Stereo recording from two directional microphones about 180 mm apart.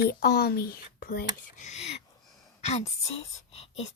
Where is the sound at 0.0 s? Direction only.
55° left (ahead or behind).